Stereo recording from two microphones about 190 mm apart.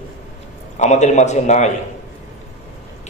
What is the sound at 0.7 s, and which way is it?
Speech, 40° left (ahead or behind).